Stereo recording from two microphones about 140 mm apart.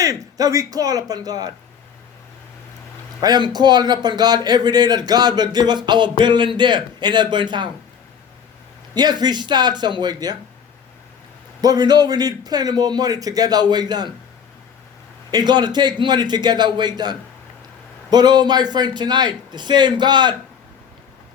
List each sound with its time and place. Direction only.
0.0 s a man's voice: 25° right (ahead or behind)
3.2 s a man's voice: 30° right (ahead or behind)
9.0 s a man's voice: 30° right (ahead or behind)
11.6 s a man's voice: 30° right (ahead or behind)
15.3 s a man's voice: 30° right (ahead or behind)